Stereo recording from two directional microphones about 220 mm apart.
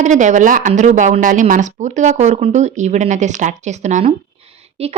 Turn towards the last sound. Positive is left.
turn(degrees=-30)  # may be behind; listen again after turning